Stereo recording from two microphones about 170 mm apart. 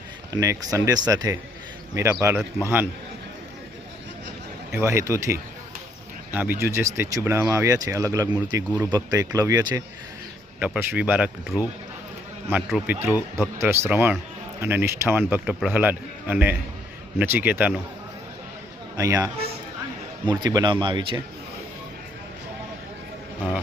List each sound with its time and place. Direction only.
0.3 s speech: 20° right (ahead or behind)
4.8 s speech: 15° right (ahead or behind)
10.6 s speech: 10° right (ahead or behind)
18.9 s speech: 20° right (ahead or behind)
20.4 s speech: 25° right (ahead or behind)